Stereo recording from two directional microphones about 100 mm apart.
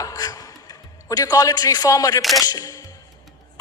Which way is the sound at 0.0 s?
40° left (ahead or behind).